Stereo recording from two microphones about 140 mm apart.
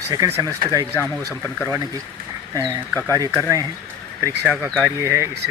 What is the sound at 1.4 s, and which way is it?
Speech, 20° left (ahead or behind).